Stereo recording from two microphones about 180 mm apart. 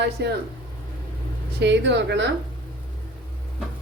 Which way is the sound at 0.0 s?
65° right (ahead or behind).